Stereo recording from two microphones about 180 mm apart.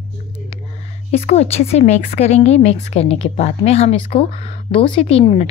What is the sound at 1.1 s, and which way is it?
A woman's voice, 40° left (ahead or behind).